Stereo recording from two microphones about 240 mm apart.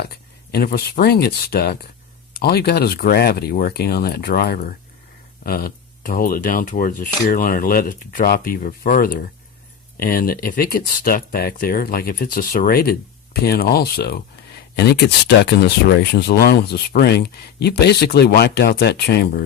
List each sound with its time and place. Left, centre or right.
0.5 s speech: left